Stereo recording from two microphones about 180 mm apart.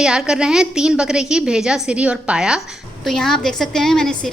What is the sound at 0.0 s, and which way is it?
A woman's voice, 5° right (ahead or behind).